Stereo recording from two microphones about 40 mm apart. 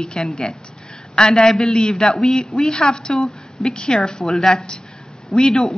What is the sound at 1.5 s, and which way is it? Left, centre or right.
Speech, centre.